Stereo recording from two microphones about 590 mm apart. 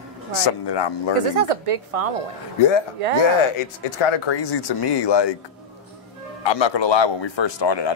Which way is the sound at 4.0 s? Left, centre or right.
Left.